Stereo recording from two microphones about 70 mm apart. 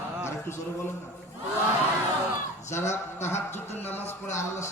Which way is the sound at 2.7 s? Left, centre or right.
Left.